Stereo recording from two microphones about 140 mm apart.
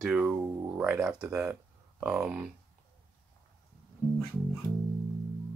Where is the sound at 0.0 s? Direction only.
5° right (ahead or behind).